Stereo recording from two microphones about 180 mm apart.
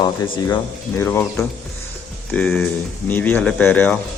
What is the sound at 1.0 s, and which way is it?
Speech, 10° left (ahead or behind).